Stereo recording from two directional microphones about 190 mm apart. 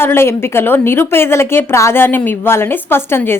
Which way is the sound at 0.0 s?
10° left (ahead or behind).